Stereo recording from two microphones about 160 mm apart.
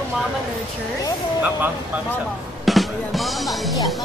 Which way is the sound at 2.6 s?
Centre (ahead or behind).